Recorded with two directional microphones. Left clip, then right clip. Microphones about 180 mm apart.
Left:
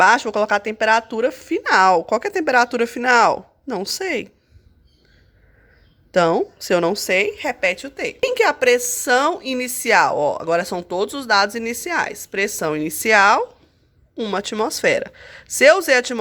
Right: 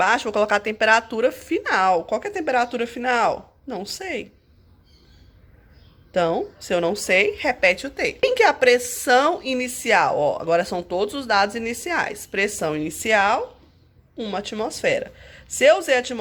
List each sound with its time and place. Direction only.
0.0 s speech: 25° left (ahead or behind)
6.1 s speech: 35° left (ahead or behind)